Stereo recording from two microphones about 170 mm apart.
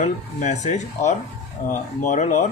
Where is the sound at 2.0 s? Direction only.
45° left (ahead or behind).